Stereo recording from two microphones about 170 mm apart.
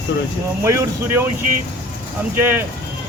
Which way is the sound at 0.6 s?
15° right (ahead or behind).